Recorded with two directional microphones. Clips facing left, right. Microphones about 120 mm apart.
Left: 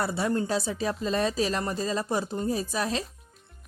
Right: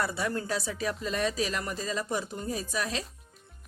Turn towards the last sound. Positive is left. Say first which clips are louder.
# left 4 dB
turn(degrees=35)  # may be behind; listen again after turning